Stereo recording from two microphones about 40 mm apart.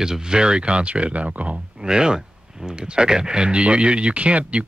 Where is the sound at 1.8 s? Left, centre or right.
Centre.